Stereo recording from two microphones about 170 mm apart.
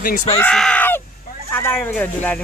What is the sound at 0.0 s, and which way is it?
Speech, 55° left (ahead or behind).